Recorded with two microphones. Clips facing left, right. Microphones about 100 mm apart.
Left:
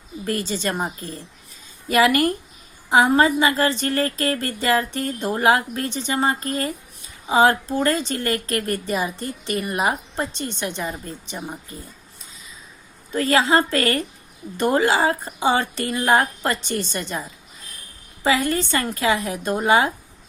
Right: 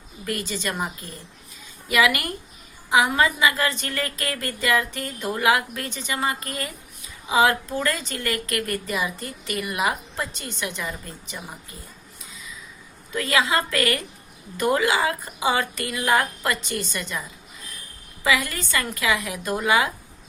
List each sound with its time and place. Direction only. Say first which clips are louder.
0.3 s a woman's voice: left 4 dB; 30° left (ahead or behind)
13.1 s a woman's voice: left 4 dB; 35° left (ahead or behind)